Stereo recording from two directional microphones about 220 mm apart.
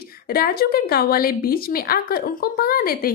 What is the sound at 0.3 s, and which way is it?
A woman's voice, 45° left (ahead or behind).